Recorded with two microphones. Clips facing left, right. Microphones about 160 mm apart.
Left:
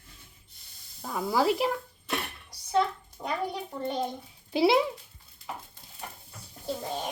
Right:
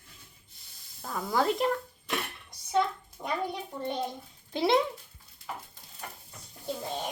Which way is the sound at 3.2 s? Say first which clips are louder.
Left 1 dB; 10° left (ahead or behind).